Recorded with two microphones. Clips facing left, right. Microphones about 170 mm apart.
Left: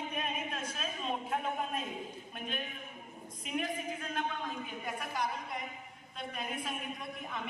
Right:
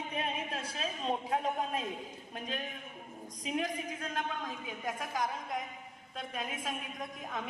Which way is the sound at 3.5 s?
40° right (ahead or behind).